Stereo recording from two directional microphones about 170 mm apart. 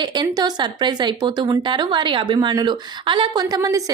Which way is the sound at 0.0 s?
25° right (ahead or behind).